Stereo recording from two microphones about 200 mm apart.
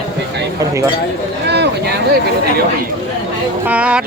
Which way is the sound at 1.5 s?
55° right (ahead or behind).